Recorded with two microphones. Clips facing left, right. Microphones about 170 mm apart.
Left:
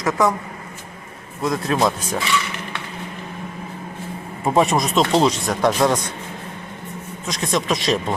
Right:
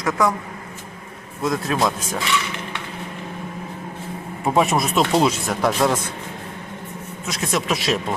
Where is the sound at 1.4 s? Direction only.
Centre (ahead or behind).